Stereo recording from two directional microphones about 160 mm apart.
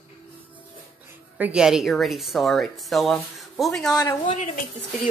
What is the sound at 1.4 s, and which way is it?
Speech, 5° right (ahead or behind).